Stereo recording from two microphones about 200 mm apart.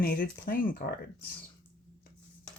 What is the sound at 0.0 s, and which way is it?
Speech, 50° left (ahead or behind).